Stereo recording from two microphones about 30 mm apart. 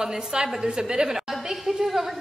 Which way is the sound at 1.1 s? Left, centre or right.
Centre.